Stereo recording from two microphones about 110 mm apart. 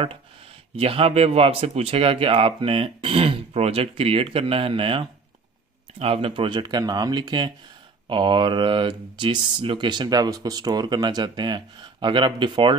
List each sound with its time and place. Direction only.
0.7 s speech: 60° right (ahead or behind)